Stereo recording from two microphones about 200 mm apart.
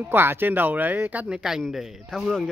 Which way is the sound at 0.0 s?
10° right (ahead or behind).